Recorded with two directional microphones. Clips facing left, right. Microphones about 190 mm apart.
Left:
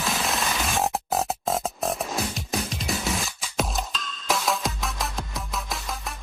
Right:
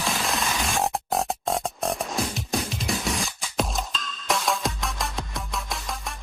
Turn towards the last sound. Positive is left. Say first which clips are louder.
# even
turn(degrees=0)  # may be behind; listen again after turning